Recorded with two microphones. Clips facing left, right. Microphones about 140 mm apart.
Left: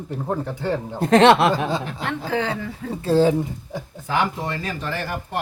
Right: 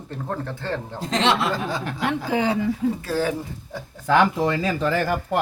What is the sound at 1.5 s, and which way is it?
Speech, 20° left (ahead or behind).